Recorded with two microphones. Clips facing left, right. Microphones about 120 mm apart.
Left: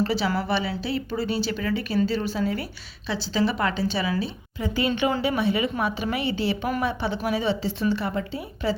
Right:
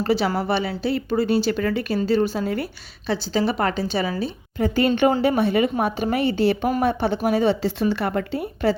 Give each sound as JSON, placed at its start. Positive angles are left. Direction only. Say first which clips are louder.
{"t": 0.0, "sound": "a woman's voice", "louder": "right 3 dB", "side_deg": -50}